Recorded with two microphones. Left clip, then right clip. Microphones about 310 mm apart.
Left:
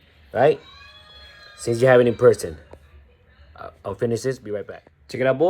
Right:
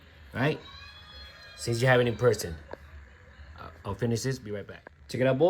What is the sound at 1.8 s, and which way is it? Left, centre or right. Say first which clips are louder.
Speech: left 9 dB; centre.